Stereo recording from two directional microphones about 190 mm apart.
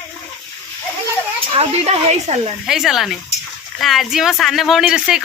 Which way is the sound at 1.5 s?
35° right (ahead or behind).